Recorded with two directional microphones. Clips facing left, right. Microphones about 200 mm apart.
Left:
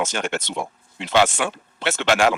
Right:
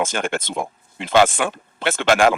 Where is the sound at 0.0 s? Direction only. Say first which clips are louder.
Right 2 dB; 50° right (ahead or behind).